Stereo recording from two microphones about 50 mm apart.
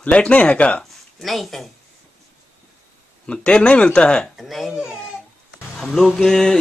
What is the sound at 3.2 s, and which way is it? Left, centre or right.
Speech, left.